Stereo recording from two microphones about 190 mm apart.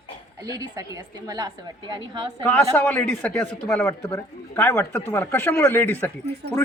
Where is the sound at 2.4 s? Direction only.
10° left (ahead or behind).